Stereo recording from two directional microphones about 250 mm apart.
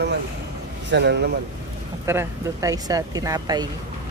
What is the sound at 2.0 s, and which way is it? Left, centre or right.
Speech, centre.